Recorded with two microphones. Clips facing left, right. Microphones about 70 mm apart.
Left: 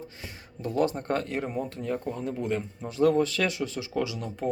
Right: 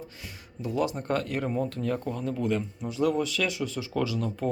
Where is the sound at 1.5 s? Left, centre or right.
Centre.